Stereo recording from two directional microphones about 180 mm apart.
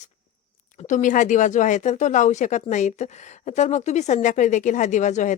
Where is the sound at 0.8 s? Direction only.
45° left (ahead or behind).